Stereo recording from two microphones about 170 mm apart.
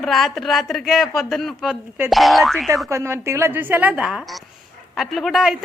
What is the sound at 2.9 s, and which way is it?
A woman's voice, 15° right (ahead or behind).